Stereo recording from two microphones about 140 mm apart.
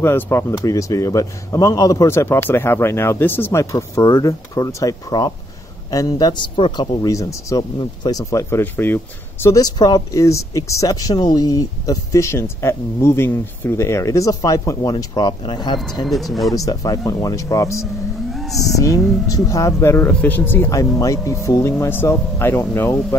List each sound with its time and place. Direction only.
0.0 s speech: 20° left (ahead or behind)
9.6 s speech: 30° left (ahead or behind)
16.1 s speech: centre (ahead or behind)
16.5 s speech: 25° left (ahead or behind)
18.3 s a sound: centre (ahead or behind)
18.8 s speech: 25° left (ahead or behind)